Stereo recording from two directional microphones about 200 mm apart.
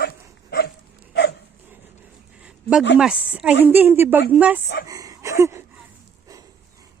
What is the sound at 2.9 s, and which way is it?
A woman's voice, 5° right (ahead or behind).